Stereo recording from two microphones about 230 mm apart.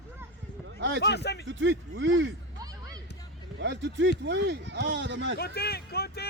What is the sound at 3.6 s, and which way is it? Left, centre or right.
Speech, right.